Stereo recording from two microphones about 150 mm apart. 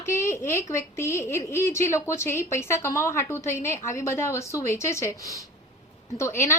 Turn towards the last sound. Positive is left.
turn(degrees=15)  # may be behind; listen again after turning